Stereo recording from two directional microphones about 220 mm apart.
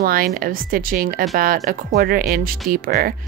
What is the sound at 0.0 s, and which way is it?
Speech, 40° right (ahead or behind).